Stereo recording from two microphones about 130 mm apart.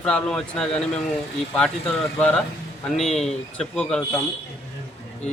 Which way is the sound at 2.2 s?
10° left (ahead or behind).